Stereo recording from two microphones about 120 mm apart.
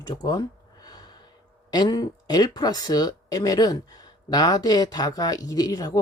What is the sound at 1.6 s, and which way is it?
Speech, 35° left (ahead or behind).